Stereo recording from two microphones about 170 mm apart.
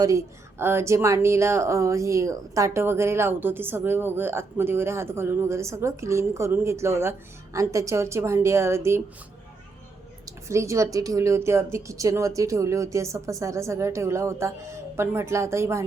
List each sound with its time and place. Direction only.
0.6 s speech: 15° right (ahead or behind)
10.2 s speech: 15° right (ahead or behind)